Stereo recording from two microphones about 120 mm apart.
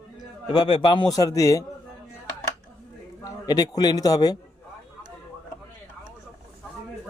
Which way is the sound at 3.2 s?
30° left (ahead or behind).